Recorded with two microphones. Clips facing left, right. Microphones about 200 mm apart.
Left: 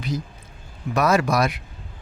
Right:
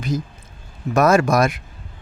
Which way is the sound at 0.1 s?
45° right (ahead or behind).